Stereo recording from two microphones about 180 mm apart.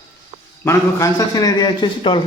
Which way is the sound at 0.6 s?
15° left (ahead or behind).